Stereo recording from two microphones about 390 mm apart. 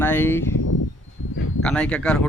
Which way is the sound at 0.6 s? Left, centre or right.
Left.